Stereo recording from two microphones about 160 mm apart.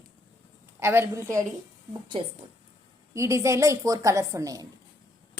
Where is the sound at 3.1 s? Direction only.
20° right (ahead or behind).